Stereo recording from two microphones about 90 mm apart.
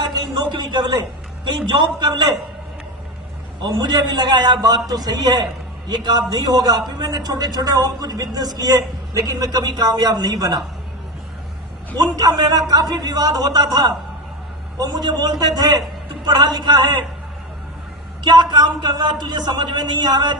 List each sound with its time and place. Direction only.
0.1 s a sound: 55° right (ahead or behind)
1.5 s a man's voice: 60° right (ahead or behind)
3.6 s a man's voice: 50° right (ahead or behind)
11.9 s a man's voice: 45° right (ahead or behind)
18.2 s a man's voice: 55° right (ahead or behind)